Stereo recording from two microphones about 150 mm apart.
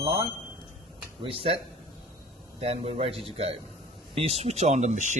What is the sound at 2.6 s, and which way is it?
Speech, 40° right (ahead or behind).